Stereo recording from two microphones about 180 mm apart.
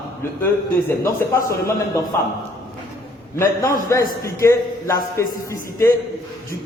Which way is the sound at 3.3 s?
15° left (ahead or behind).